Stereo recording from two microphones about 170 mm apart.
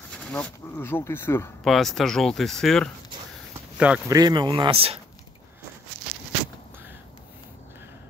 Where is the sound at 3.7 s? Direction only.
5° right (ahead or behind).